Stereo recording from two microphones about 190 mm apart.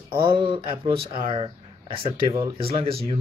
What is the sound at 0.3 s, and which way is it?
Speech, 25° right (ahead or behind).